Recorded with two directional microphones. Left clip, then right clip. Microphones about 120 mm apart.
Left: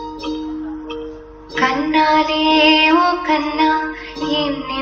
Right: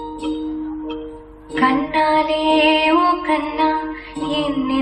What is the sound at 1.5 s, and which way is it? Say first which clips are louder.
Music: left 1 dB; 45° right (ahead or behind).